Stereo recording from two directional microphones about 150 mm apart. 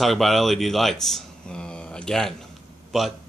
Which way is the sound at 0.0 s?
Centre (ahead or behind).